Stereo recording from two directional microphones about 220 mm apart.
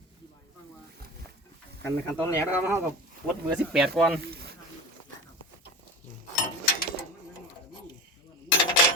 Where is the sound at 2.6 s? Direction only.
10° right (ahead or behind).